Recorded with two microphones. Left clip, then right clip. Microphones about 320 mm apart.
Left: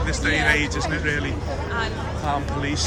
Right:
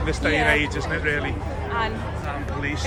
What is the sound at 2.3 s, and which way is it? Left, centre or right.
Speech, centre.